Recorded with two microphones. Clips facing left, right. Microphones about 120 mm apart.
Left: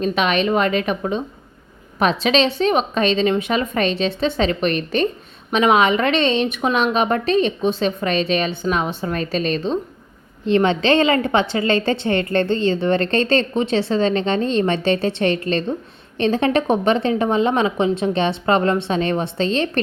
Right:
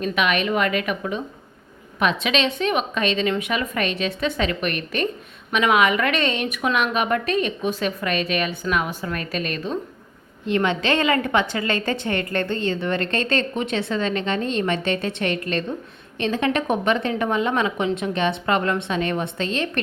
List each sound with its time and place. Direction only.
0.0 s a woman's voice: 30° left (ahead or behind)